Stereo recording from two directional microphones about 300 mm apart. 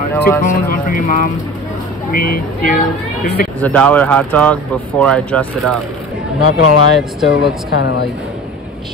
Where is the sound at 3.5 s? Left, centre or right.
Centre.